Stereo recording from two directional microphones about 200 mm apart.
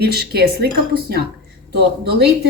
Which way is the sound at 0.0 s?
50° right (ahead or behind).